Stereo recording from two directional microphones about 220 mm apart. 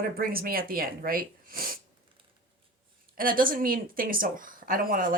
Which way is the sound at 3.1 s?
40° right (ahead or behind).